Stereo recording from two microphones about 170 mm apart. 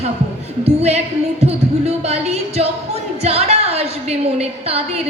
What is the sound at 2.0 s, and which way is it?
A woman's voice, 40° right (ahead or behind).